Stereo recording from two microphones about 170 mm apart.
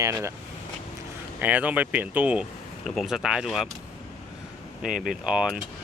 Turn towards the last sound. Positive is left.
turn(degrees=-5)  # may be behind; listen again after turning